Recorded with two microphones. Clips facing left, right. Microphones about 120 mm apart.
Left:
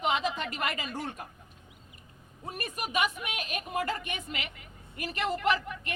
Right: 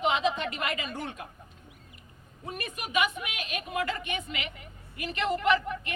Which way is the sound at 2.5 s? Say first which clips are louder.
Right 2 dB; 40° left (ahead or behind).